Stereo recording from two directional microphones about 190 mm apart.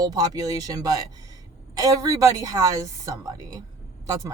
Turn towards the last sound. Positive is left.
turn(degrees=-20)  # may be behind; listen again after turning